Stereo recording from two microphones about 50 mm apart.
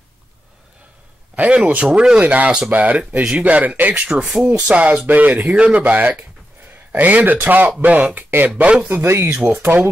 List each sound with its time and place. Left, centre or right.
1.3 s speech: right
2.2 s speech: right
3.9 s speech: right
8.5 s speech: right
8.8 s speech: right